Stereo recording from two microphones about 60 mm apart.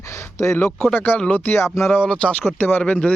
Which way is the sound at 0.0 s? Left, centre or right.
Left.